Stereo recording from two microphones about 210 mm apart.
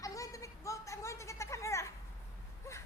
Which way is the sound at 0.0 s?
15° left (ahead or behind).